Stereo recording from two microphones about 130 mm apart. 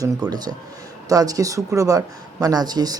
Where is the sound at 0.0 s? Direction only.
30° right (ahead or behind).